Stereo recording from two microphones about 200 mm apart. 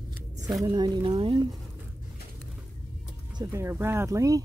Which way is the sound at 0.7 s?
20° right (ahead or behind).